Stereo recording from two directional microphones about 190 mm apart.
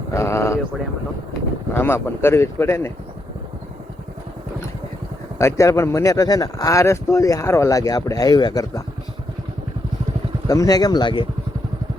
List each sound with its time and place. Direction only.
0.1 s a sound: 15° left (ahead or behind)
1.7 s speech: 10° left (ahead or behind)
5.4 s speech: 15° left (ahead or behind)
10.4 s speech: 15° left (ahead or behind)